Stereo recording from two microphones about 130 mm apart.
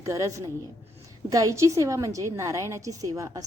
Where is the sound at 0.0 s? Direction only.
25° right (ahead or behind).